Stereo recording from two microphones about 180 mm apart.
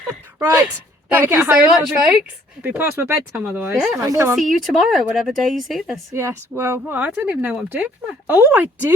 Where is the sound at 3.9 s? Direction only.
20° right (ahead or behind).